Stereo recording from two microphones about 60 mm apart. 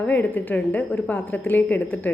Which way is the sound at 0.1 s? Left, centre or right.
Left.